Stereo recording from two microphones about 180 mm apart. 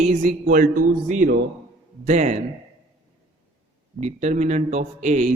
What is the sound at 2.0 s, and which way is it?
Speech, 40° right (ahead or behind).